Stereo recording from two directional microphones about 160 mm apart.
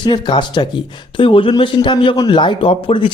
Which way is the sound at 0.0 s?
30° left (ahead or behind).